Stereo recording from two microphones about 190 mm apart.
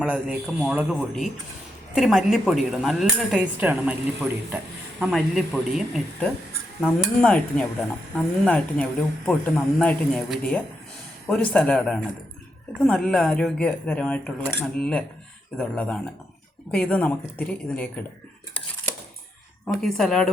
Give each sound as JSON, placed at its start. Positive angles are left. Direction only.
{"t": 0.0, "sound": "speech", "side_deg": -5}
{"t": 12.8, "sound": "speech", "side_deg": 5}
{"t": 19.6, "sound": "speech", "side_deg": 5}